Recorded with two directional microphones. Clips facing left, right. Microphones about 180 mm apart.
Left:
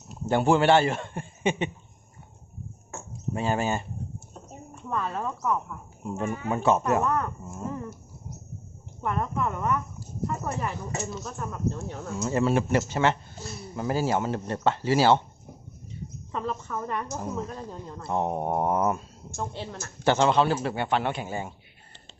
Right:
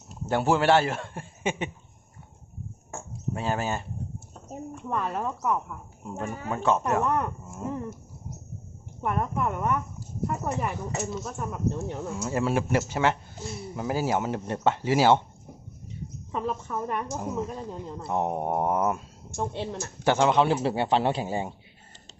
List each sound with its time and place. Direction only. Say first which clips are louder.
0.3 s a man's voice: left 2 dB; 5° right (ahead or behind)
3.3 s a man's voice: left 3 dB; centre (ahead or behind)
4.8 s a woman's voice: even; 10° right (ahead or behind)
6.1 s a man's voice: left 3 dB; 5° left (ahead or behind)
7.6 s a woman's voice: right 2 dB; 15° right (ahead or behind)
9.0 s a woman's voice: right 1 dB; 10° right (ahead or behind)
12.1 s a woman's voice: left 3 dB; 5° right (ahead or behind)
13.4 s a woman's voice: right 2 dB; 25° right (ahead or behind)
13.7 s a woman's voice: left 1 dB; 10° right (ahead or behind)
16.3 s a woman's voice: right 1 dB; 10° right (ahead or behind)
19.4 s a woman's voice: right 4 dB; 20° right (ahead or behind)